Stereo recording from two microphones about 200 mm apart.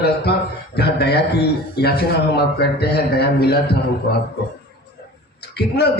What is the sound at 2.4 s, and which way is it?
A man's voice, 55° left (ahead or behind).